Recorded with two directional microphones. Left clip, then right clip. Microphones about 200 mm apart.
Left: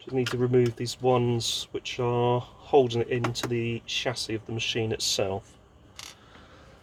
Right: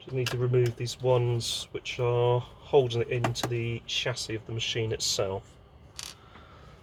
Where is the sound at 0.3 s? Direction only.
45° left (ahead or behind).